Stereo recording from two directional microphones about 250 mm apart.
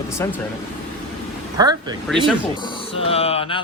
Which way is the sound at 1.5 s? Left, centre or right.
Centre.